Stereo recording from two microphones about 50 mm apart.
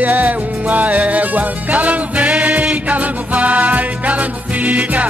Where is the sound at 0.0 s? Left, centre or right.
Right.